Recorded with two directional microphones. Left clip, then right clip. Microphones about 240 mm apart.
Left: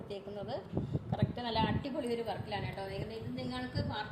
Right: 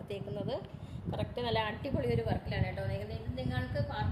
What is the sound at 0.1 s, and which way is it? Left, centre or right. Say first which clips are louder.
A woman's voice: right 3 dB; right.